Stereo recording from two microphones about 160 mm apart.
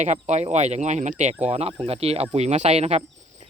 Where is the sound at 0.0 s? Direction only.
45° right (ahead or behind).